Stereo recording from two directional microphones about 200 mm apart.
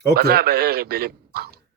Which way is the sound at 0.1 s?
50° right (ahead or behind).